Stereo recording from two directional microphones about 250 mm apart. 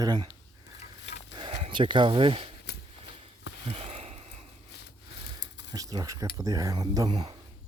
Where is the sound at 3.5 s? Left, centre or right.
Left.